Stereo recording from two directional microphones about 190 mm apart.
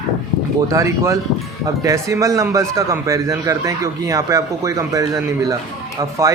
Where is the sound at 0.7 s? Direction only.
15° right (ahead or behind).